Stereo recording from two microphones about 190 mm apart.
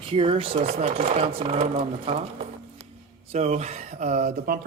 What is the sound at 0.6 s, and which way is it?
Speech, 40° right (ahead or behind).